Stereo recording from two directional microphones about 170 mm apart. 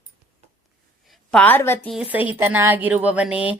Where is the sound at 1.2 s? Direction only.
5° left (ahead or behind).